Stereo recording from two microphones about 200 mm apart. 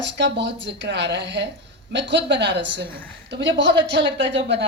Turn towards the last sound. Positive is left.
turn(degrees=-60)  # may be behind; listen again after turning